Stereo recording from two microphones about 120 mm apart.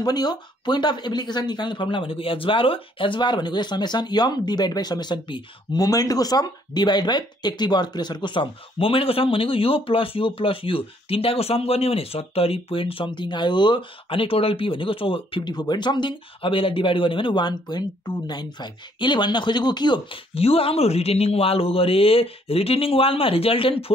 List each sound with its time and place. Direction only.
0.0 s speech: 35° left (ahead or behind)
20.3 s speech: 55° left (ahead or behind)